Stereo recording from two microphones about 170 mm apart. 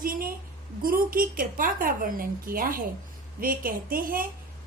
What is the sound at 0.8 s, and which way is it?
A woman's voice, 55° right (ahead or behind).